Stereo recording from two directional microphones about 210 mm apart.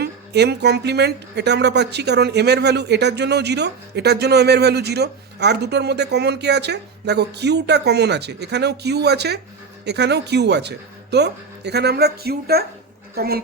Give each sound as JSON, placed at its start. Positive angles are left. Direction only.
{"t": 0.0, "sound": "speech", "side_deg": -55}